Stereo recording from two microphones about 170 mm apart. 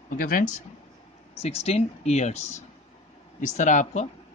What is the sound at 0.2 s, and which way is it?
Speech, 55° left (ahead or behind).